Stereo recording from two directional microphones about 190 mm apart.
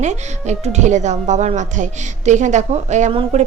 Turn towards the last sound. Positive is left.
turn(degrees=-35)  # may be behind; listen again after turning